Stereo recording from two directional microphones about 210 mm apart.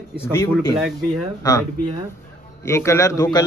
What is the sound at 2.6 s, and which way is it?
Speech, 15° left (ahead or behind).